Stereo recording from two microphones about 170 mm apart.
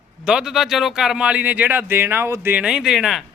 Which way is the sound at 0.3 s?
5° right (ahead or behind).